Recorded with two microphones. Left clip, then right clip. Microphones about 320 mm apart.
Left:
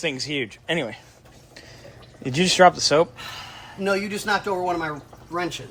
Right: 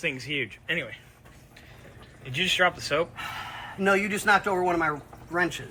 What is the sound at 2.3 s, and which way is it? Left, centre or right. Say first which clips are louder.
Speech: left 8 dB; left.